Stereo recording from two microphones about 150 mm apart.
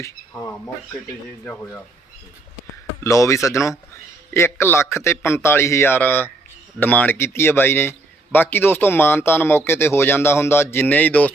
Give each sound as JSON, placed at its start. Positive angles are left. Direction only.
{"t": 0.0, "sound": "a man's voice", "side_deg": 15}
{"t": 3.0, "sound": "a man's voice", "side_deg": 20}